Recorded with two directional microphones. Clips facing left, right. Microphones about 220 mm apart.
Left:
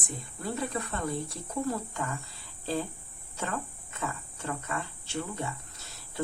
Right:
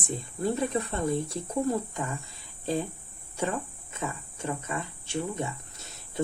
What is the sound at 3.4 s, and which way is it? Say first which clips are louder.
Speech: right 5 dB; 20° right (ahead or behind).